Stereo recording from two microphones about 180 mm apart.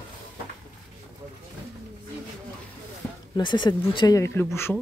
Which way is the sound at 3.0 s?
10° left (ahead or behind).